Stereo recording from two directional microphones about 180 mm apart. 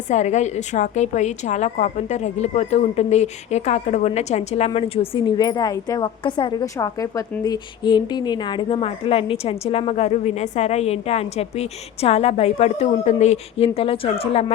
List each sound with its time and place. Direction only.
0.1 s a woman's voice: 40° left (ahead or behind)